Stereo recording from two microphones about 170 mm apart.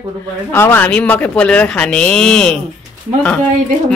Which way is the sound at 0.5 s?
15° left (ahead or behind).